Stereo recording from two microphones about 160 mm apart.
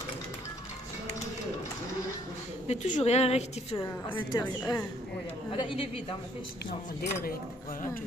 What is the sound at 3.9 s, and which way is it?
Speech, 15° left (ahead or behind).